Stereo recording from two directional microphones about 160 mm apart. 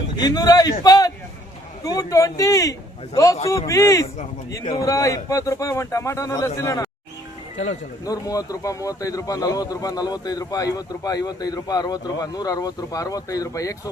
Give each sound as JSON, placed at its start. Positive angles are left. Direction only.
{"t": 0.2, "sound": "a man's voice", "side_deg": 25}
{"t": 8.0, "sound": "a man's voice", "side_deg": 20}